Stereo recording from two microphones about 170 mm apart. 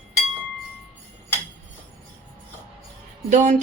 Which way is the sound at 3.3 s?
45° right (ahead or behind).